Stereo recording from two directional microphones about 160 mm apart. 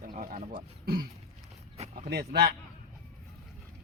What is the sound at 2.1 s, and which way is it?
Speech, 80° right.